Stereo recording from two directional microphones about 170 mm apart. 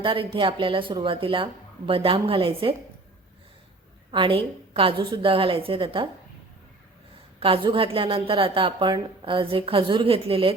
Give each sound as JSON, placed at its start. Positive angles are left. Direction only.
{"t": 0.0, "sound": "a woman's voice", "side_deg": -30}
{"t": 4.1, "sound": "a woman's voice", "side_deg": -30}
{"t": 7.3, "sound": "a woman's voice", "side_deg": -30}